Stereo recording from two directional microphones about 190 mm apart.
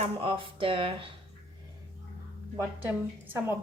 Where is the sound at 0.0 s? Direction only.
30° right (ahead or behind).